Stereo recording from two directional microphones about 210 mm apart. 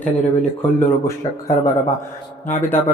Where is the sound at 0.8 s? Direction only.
15° left (ahead or behind).